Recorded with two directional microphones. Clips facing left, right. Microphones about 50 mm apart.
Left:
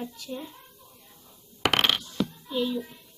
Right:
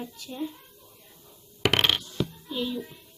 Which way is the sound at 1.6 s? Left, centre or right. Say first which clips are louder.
Even; centre.